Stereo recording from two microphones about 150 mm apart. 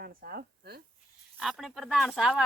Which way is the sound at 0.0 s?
85° right.